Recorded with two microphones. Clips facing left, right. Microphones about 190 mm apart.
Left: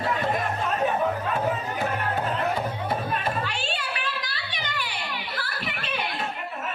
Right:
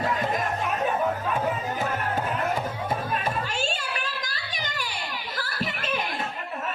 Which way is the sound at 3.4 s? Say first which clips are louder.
Right 1 dB; 45° right (ahead or behind).